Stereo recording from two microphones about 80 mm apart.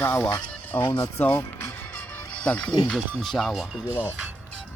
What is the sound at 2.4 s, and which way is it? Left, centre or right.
Speech, centre.